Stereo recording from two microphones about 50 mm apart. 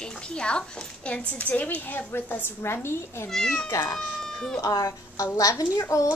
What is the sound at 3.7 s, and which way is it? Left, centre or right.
Speech, left.